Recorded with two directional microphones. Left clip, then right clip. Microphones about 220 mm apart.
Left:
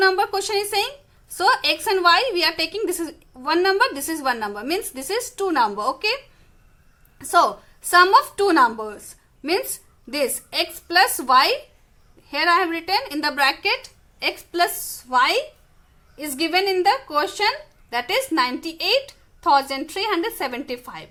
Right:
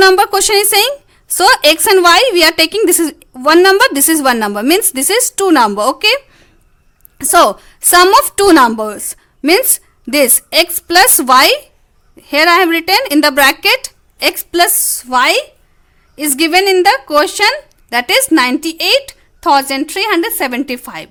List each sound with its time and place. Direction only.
0.0 s speech: 50° right (ahead or behind)
7.2 s speech: 50° right (ahead or behind)